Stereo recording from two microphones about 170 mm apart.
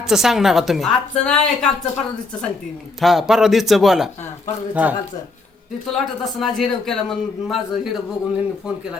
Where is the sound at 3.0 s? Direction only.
Centre (ahead or behind).